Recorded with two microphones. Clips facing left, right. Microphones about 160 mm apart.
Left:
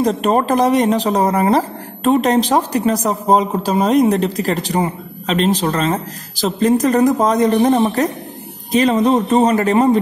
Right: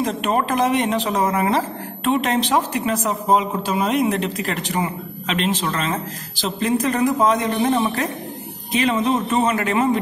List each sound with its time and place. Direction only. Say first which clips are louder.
0.0 s a woman's voice: left 5 dB; 35° left (ahead or behind)